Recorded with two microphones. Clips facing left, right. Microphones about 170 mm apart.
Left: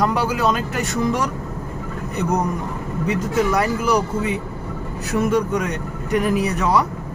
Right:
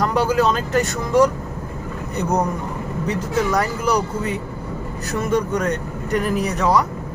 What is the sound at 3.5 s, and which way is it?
Speech, 5° left (ahead or behind).